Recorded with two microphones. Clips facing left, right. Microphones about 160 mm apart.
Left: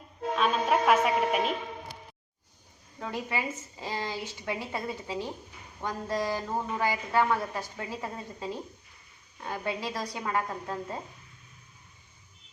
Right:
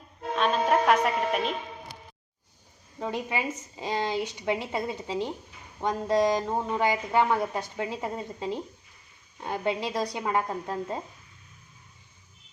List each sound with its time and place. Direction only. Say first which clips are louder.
0.3 s music: right 2 dB; 5° left (ahead or behind)
3.0 s a woman's voice: right 3 dB; 20° right (ahead or behind)